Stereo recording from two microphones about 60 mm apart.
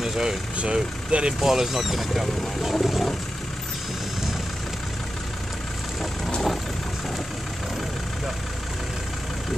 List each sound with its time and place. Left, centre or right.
0.0 s speech: centre
0.6 s speech: centre
6.2 s vehicle: centre